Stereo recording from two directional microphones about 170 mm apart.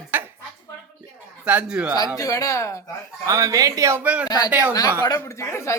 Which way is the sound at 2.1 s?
20° left (ahead or behind).